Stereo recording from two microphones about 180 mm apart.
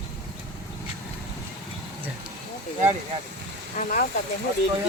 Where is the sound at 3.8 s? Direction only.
45° left (ahead or behind).